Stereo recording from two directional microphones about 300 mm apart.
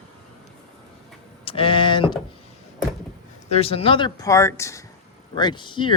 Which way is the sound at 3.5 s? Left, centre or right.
Centre.